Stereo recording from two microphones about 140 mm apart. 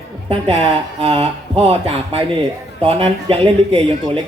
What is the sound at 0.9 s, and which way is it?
Speech, 40° right (ahead or behind).